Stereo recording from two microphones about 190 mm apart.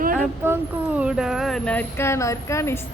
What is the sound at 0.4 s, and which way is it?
Speech, 10° right (ahead or behind).